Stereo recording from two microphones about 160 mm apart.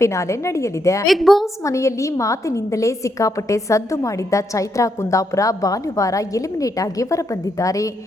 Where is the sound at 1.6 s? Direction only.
20° left (ahead or behind).